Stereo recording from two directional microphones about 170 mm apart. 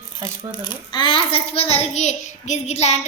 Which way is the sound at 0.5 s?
25° left (ahead or behind).